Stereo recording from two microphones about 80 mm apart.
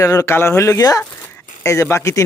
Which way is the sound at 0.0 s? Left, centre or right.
Left.